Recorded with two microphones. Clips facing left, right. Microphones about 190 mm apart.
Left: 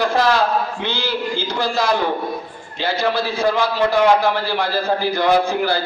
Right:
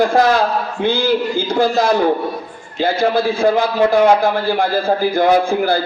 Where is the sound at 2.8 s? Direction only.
50° right (ahead or behind).